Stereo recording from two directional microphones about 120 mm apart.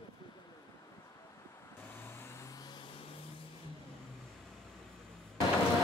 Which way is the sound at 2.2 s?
20° left (ahead or behind).